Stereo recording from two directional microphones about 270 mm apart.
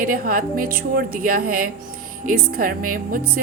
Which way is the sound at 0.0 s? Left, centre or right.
Right.